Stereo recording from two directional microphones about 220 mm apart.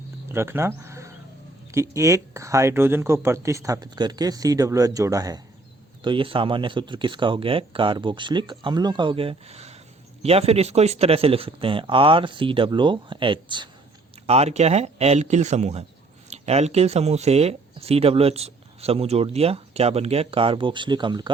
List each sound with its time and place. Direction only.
0.3 s speech: 10° right (ahead or behind)